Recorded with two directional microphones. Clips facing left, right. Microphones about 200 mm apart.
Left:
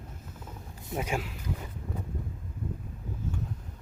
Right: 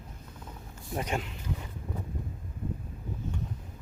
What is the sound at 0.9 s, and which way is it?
Speech, 5° left (ahead or behind).